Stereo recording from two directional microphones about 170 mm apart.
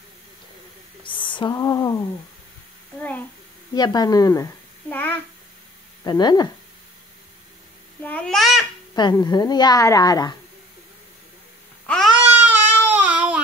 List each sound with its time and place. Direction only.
1.0 s a child's voice: 30° left (ahead or behind)
3.0 s a child's voice: 10° left (ahead or behind)
3.7 s a child's voice: 25° left (ahead or behind)
6.0 s a child's voice: 25° left (ahead or behind)
8.0 s a child's voice: 10° left (ahead or behind)
8.9 s a child's voice: 25° left (ahead or behind)
11.8 s babbling: 5° left (ahead or behind)
12.2 s baby cry: 10° right (ahead or behind)